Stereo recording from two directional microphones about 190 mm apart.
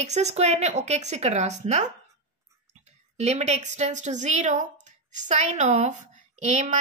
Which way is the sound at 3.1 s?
35° right (ahead or behind).